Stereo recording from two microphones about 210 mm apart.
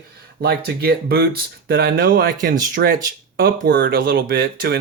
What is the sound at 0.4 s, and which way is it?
Speech, 50° right (ahead or behind).